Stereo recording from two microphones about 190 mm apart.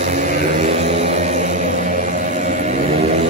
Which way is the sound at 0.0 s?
40° right (ahead or behind).